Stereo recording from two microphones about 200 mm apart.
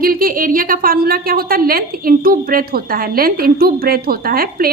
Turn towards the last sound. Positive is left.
turn(degrees=-50)  # may be behind; listen again after turning